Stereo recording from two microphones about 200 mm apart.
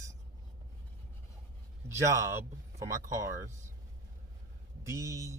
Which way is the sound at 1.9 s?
15° right (ahead or behind).